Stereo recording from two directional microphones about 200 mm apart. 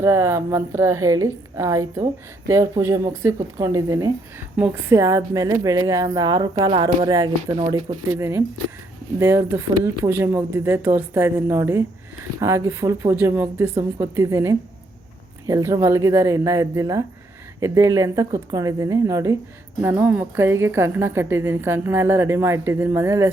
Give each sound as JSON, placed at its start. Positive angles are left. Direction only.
{"t": 0.0, "sound": "a woman's voice", "side_deg": -15}